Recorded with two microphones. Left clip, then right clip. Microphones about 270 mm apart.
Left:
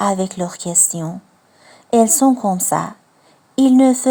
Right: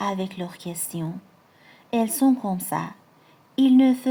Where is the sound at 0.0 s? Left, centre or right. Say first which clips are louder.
Left 9 dB; left.